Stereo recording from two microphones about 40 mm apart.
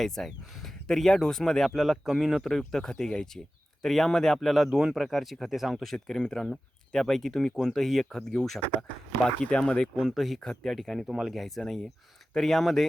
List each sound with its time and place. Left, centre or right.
0.0 s speech: centre
1.7 s speech: centre
2.6 s speech: centre
4.4 s speech: centre
5.8 s speech: centre
9.5 s speech: left
9.9 s speech: centre
10.2 s speech: centre
10.4 s speech: centre
11.0 s speech: centre
11.3 s speech: centre